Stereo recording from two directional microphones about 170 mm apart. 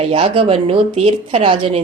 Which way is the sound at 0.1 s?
35° right (ahead or behind).